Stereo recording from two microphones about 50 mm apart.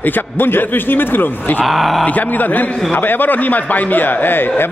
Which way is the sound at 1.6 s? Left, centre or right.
Centre.